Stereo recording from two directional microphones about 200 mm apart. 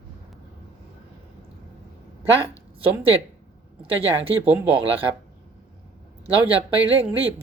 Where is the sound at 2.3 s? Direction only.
30° right (ahead or behind).